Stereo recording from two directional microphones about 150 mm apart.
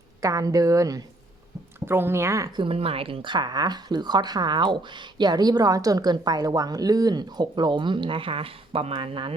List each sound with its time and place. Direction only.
0.2 s speech: 20° right (ahead or behind)
2.6 s speech: 40° right (ahead or behind)